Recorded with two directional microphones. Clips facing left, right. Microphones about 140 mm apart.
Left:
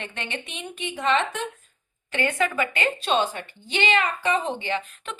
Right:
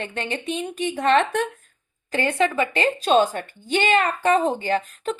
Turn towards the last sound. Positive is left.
turn(degrees=-40)  # may be behind; listen again after turning